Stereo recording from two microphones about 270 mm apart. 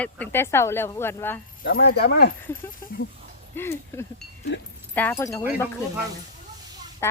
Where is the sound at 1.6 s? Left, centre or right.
Left.